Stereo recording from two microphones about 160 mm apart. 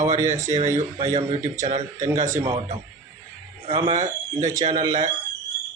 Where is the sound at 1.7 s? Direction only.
45° right (ahead or behind).